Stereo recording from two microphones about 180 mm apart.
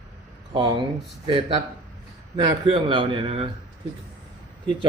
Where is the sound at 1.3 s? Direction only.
25° right (ahead or behind).